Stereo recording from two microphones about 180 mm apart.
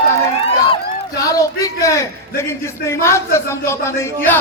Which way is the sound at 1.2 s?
20° left (ahead or behind).